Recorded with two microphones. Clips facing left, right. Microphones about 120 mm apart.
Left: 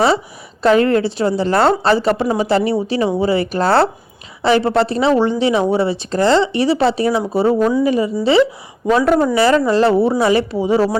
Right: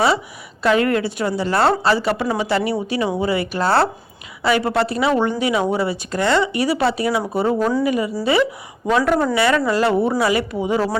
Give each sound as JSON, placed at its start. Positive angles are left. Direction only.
{"t": 0.6, "sound": "speech", "side_deg": 35}
{"t": 7.4, "sound": "speech", "side_deg": 20}